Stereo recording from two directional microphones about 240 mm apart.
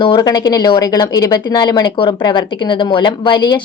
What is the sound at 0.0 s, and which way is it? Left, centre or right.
A woman's voice, centre.